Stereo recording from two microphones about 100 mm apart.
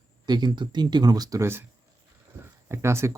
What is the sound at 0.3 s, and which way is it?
Speech, 45° right (ahead or behind).